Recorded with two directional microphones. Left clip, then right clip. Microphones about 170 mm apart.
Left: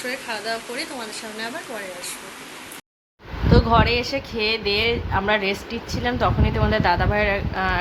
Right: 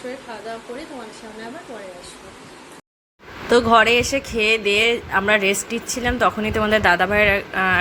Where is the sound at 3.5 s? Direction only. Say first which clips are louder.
Right 5 dB; 20° right (ahead or behind).